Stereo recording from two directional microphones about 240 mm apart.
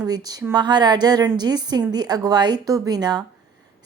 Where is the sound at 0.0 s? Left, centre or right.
Centre.